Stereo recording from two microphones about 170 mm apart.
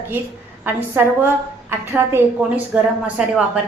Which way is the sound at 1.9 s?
15° right (ahead or behind).